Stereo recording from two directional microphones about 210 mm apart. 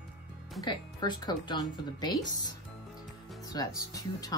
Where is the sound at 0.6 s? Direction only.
20° left (ahead or behind).